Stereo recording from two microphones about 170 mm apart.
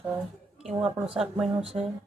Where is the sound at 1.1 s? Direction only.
5° right (ahead or behind).